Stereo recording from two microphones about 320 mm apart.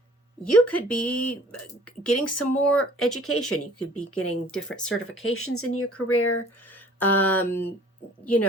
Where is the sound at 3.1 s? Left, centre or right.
Left.